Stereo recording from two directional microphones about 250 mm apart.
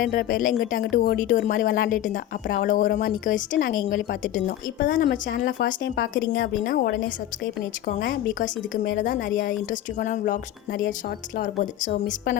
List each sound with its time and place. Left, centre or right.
0.0 s speech: left